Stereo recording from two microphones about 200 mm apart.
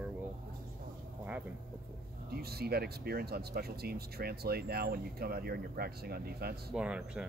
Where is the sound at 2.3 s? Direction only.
50° right (ahead or behind).